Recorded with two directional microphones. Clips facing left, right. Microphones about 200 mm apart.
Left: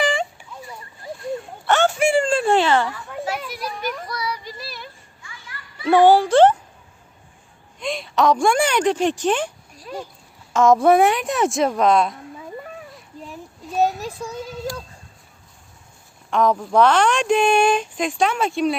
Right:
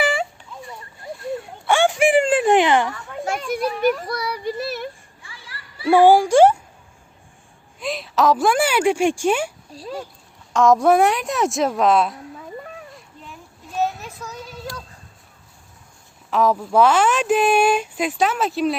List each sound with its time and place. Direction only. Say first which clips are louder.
0.0 s a sound: even; 5° right (ahead or behind)
2.9 s children playing: right 1 dB; 5° left (ahead or behind)
3.5 s a child's voice: right 9 dB; 55° right (ahead or behind)
4.3 s child singing: right 6 dB; 55° right (ahead or behind)
5.2 s children playing: left 1 dB; 30° right (ahead or behind)
5.9 s speech: right 1 dB; 10° right (ahead or behind)
7.8 s speech: even; centre (ahead or behind)
9.7 s speech: right 8 dB; 30° right (ahead or behind)
10.5 s speech: left 1 dB; centre (ahead or behind)
12.4 s a sound: left 1 dB; centre (ahead or behind)
13.8 s a sound: left 4 dB; 35° left (ahead or behind)
16.3 s speech: even; 5° right (ahead or behind)